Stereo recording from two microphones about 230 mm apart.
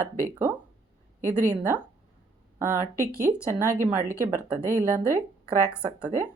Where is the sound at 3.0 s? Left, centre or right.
Right.